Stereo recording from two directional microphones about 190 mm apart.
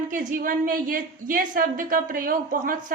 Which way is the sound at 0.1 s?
45° right (ahead or behind).